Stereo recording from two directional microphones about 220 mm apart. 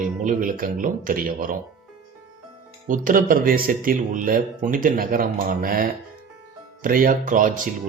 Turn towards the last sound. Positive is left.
turn(degrees=-35)  # may be behind; listen again after turning